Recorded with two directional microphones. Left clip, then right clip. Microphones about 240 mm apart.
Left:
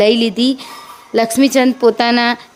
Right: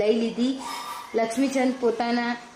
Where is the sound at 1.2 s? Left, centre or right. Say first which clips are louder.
Left 11 dB; left.